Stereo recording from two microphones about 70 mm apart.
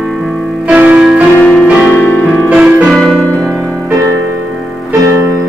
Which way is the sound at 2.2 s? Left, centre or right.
Centre.